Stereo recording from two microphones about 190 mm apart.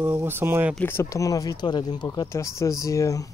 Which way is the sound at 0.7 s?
10° left (ahead or behind).